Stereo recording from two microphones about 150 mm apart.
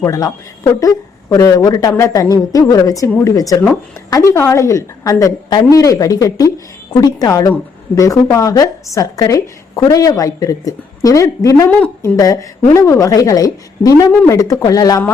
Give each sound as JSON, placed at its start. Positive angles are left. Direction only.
{"t": 0.0, "sound": "a woman's voice", "side_deg": 20}
{"t": 11.7, "sound": "a woman's voice", "side_deg": 10}
{"t": 12.1, "sound": "a woman's voice", "side_deg": 25}